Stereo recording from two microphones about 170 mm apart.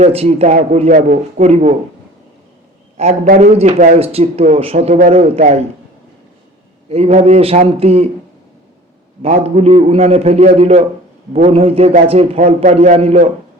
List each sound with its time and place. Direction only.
0.0 s a man's voice: 40° right (ahead or behind)
0.9 s speech: 50° right (ahead or behind)
3.0 s a man's voice: 40° right (ahead or behind)
6.8 s a man's voice: 35° right (ahead or behind)
9.2 s a man's voice: 35° right (ahead or behind)